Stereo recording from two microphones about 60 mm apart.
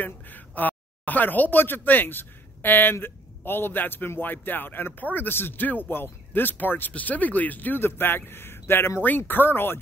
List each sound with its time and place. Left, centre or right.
0.0 s speech: left
9.0 s speech: left